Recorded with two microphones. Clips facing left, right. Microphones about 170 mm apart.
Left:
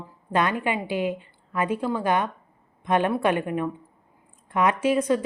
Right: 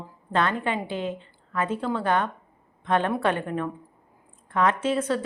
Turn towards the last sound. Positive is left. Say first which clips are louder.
# left 3 dB
turn(degrees=10)  # may be behind; listen again after turning